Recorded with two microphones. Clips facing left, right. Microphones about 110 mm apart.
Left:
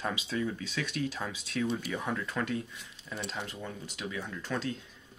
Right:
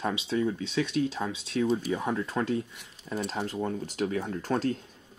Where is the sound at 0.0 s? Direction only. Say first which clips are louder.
Right 5 dB; 30° right (ahead or behind).